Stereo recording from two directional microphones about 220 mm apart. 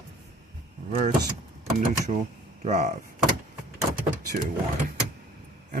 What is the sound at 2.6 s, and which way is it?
Speech, 30° right (ahead or behind).